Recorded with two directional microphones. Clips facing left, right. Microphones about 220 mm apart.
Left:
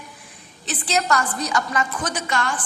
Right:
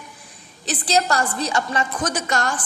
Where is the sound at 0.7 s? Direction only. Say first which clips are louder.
Right 2 dB; 35° right (ahead or behind).